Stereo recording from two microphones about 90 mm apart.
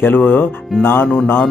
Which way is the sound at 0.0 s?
20° left (ahead or behind).